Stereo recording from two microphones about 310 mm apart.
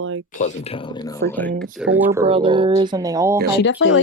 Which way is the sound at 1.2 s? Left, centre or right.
Right.